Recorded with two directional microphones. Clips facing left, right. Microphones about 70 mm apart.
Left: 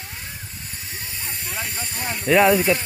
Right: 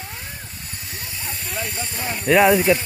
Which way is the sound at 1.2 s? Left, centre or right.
Centre.